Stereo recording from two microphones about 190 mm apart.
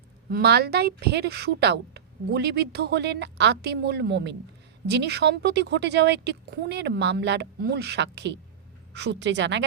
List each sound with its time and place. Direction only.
0.3 s a woman's voice: 55° right (ahead or behind)